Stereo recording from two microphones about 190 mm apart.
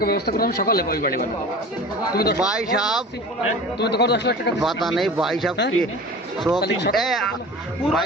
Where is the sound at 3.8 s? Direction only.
60° left (ahead or behind).